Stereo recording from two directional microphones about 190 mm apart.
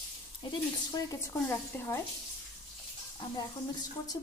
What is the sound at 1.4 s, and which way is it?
Frying, 10° left (ahead or behind).